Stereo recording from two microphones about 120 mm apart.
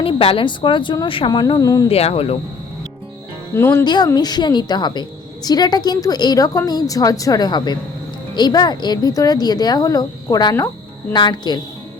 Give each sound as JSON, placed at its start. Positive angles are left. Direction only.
{"t": 0.0, "sound": "a woman's voice", "side_deg": 50}
{"t": 1.9, "sound": "speech", "side_deg": 55}
{"t": 3.5, "sound": "speech", "side_deg": 25}
{"t": 3.8, "sound": "a woman's voice", "side_deg": 35}